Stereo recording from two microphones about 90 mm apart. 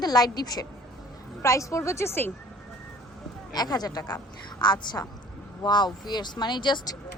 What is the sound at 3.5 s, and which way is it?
Speech, 50° left (ahead or behind).